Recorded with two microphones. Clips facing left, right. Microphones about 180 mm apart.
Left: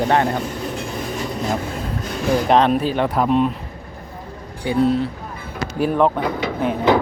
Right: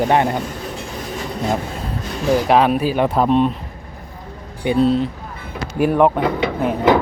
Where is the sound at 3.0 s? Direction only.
25° right (ahead or behind).